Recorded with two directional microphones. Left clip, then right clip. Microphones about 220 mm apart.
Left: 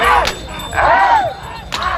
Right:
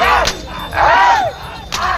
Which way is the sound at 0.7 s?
45° right (ahead or behind).